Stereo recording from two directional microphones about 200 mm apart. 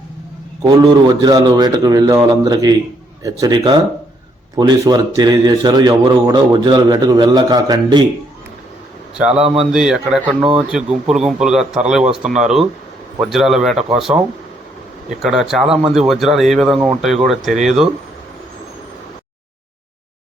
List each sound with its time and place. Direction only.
0.6 s a man's voice: 20° right (ahead or behind)
9.7 s speech: 5° right (ahead or behind)
15.2 s speech: centre (ahead or behind)